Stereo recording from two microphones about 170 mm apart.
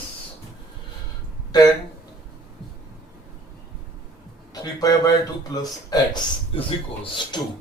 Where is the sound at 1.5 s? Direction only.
25° left (ahead or behind).